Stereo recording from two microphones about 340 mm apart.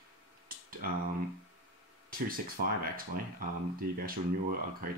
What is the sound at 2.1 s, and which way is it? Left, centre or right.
Speech, right.